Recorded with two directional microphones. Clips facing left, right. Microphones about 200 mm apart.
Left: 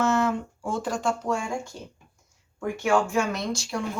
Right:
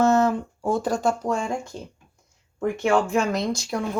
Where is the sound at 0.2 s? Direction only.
40° right (ahead or behind).